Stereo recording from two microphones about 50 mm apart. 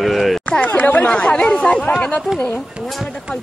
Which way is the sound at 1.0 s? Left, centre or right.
Centre.